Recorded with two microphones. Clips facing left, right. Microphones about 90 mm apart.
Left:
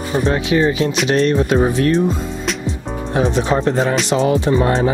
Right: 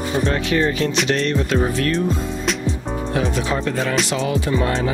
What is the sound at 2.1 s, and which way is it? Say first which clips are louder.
Music: even; centre (ahead or behind).